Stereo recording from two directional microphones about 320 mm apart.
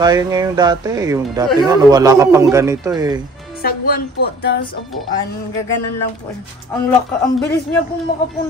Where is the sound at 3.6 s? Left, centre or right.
Left.